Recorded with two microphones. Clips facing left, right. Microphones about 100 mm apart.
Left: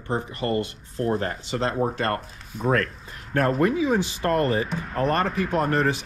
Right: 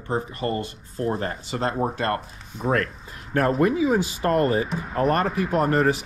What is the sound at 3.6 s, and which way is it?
Speech, 25° right (ahead or behind).